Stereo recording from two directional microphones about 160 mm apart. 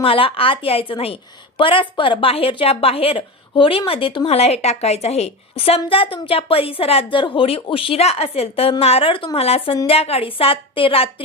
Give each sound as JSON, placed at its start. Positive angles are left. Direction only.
{"t": 0.0, "sound": "a woman's voice", "side_deg": 35}